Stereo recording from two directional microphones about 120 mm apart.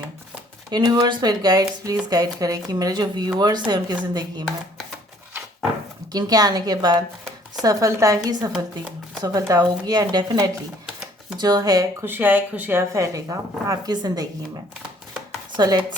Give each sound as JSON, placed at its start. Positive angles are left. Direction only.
{"t": 0.7, "sound": "speech", "side_deg": -35}
{"t": 6.1, "sound": "speech", "side_deg": -35}
{"t": 10.8, "sound": "typewriter", "side_deg": -5}
{"t": 11.3, "sound": "speech", "side_deg": -35}
{"t": 12.0, "sound": "speech", "side_deg": -15}
{"t": 15.5, "sound": "chopping", "side_deg": -35}